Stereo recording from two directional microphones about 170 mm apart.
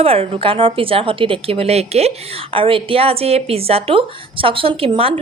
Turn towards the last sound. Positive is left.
turn(degrees=-35)  # may be behind; listen again after turning